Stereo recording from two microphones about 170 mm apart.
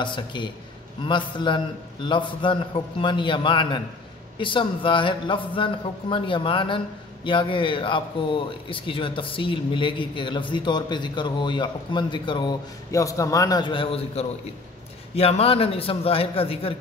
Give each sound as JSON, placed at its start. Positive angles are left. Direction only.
{"t": 0.0, "sound": "a man's voice", "side_deg": 30}